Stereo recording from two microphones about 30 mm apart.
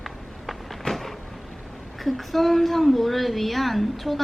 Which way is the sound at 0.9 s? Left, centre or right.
Left.